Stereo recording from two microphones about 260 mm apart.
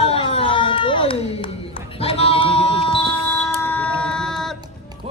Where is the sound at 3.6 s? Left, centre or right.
Centre.